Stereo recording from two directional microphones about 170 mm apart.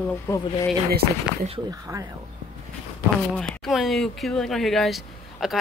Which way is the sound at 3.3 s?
5° left (ahead or behind).